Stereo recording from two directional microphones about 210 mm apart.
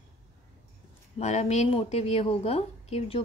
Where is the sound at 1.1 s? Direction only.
30° left (ahead or behind).